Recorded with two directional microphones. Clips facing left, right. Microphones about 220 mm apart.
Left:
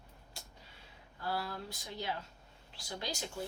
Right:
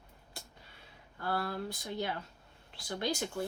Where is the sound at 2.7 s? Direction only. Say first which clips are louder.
Right 7 dB; 55° right (ahead or behind).